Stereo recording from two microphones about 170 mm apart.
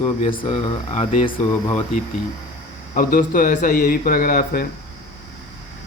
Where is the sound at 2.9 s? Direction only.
55° left (ahead or behind).